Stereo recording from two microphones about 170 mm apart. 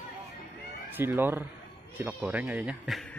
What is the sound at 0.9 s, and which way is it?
Speech, 10° right (ahead or behind).